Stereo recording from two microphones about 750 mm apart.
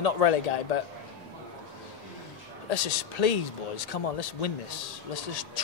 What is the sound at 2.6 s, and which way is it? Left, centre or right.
Speech, left.